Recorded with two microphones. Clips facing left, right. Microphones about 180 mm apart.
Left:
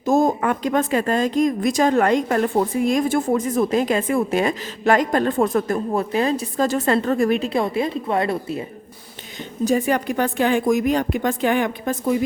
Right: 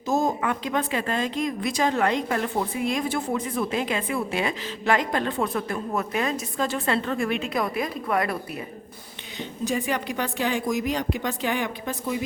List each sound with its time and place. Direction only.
0.0 s speech: 50° left (ahead or behind)
5.9 s a woman's voice: 30° left (ahead or behind)
9.4 s speech: 45° left (ahead or behind)